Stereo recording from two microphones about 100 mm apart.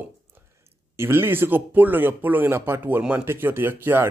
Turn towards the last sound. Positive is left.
turn(degrees=-20)  # may be behind; listen again after turning